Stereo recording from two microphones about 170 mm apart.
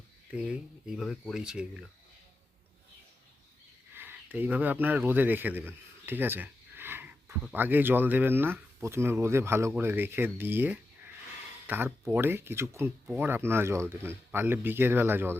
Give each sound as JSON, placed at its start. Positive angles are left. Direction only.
{"t": 0.3, "sound": "speech", "side_deg": -5}
{"t": 3.9, "sound": "speech", "side_deg": -10}